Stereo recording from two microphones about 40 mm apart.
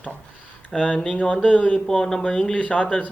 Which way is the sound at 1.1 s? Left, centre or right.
Left.